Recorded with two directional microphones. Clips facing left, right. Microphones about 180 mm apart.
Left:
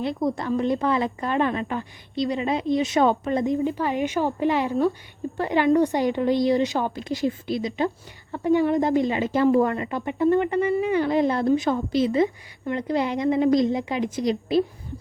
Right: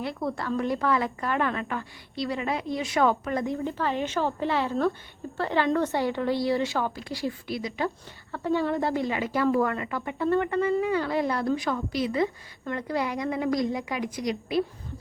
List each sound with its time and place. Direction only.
0.0 s a woman's voice: 20° left (ahead or behind)